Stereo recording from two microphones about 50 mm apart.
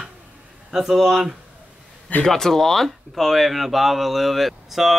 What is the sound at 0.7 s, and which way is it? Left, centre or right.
Speech, centre.